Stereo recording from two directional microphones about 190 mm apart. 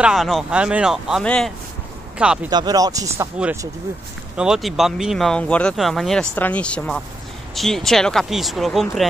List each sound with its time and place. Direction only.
0.0 s speech: centre (ahead or behind)
2.5 s speech: 20° right (ahead or behind)
4.4 s speech: centre (ahead or behind)